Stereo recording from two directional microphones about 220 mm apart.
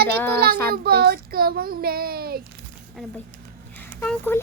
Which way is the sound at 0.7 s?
45° right (ahead or behind).